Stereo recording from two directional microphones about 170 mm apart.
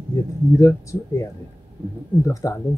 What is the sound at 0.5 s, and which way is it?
Speech, 20° left (ahead or behind).